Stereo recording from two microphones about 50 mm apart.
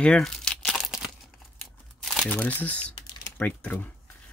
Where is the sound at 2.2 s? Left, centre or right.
Left.